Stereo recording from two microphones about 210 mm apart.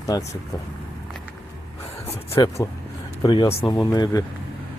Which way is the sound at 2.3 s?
15° left (ahead or behind).